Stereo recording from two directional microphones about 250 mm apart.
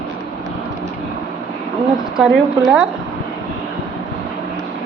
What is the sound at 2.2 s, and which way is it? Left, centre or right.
Speech, centre.